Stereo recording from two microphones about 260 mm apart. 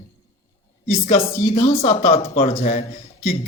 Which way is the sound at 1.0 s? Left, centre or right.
Left.